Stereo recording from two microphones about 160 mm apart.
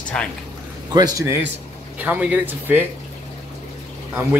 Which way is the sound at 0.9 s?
20° right (ahead or behind).